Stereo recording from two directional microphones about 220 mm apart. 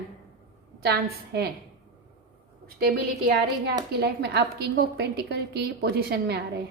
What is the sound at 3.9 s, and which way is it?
A woman's voice, 50° right (ahead or behind).